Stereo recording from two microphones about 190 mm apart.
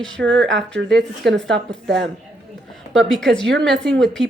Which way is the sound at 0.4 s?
70° right (ahead or behind).